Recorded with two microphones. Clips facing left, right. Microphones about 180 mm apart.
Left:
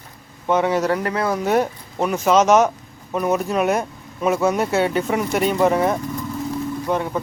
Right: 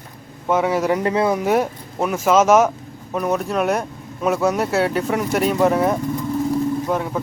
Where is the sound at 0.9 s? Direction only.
20° right (ahead or behind).